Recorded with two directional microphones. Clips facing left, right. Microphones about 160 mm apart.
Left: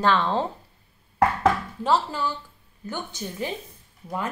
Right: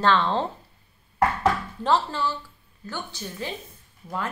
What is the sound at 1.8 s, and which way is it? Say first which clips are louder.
Speech: even; 10° left (ahead or behind).